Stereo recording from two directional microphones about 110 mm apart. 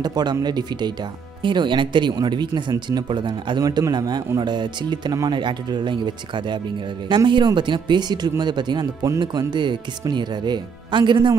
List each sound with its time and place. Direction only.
0.0 s speech: 40° right (ahead or behind)